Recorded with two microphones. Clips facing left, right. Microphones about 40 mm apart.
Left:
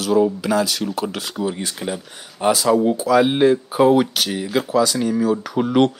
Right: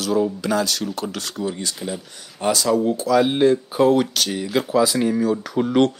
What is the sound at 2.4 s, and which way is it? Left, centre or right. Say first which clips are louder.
Speech: left 3 dB; centre.